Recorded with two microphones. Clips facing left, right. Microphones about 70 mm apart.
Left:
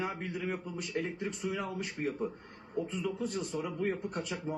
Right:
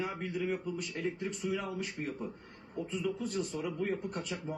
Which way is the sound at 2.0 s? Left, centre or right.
Left.